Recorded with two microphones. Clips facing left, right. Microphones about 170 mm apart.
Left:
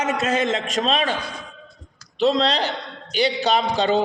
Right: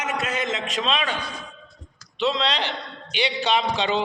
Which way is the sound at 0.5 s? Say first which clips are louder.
Left 4 dB; 45° left (ahead or behind).